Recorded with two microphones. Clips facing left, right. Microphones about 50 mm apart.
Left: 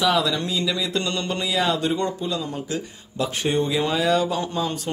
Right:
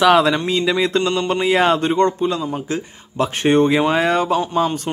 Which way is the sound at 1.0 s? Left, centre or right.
Right.